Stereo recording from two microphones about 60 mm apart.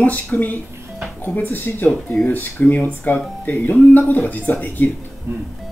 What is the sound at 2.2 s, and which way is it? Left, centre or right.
Speech, left.